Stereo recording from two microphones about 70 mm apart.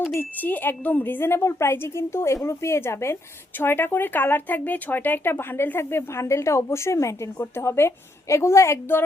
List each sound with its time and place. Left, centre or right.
0.2 s speech: left